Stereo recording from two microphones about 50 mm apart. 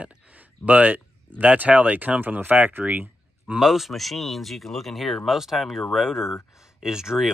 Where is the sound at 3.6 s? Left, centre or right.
Centre.